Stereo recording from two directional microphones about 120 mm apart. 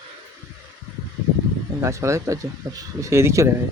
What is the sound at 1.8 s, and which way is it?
Speech, 25° right (ahead or behind).